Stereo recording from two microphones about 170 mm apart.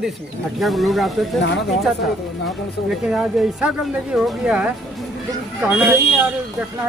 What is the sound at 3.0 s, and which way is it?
Speech, centre (ahead or behind).